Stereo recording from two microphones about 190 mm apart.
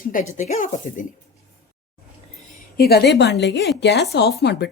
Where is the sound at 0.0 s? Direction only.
45° left (ahead or behind).